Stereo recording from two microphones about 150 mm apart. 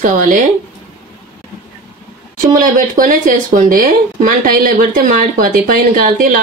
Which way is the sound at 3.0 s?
60° right (ahead or behind).